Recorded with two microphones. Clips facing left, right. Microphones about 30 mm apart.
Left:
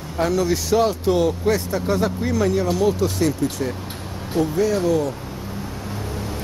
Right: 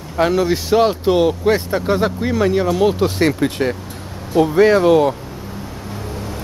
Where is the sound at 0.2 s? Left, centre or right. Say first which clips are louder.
Right 4 dB; right.